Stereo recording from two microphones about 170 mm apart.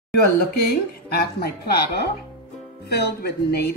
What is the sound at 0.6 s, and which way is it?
A woman's voice, 65° left (ahead or behind).